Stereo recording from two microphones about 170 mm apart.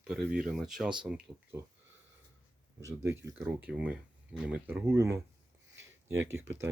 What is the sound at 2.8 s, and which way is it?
Speech, 15° right (ahead or behind).